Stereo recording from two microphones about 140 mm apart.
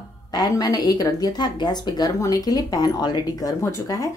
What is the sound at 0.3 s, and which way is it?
Speech, 30° left (ahead or behind).